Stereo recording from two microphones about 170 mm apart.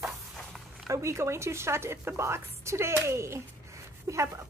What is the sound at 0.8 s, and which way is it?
A woman's voice, 20° right (ahead or behind).